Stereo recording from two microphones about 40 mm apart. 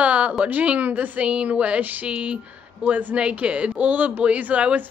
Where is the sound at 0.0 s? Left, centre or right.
Right.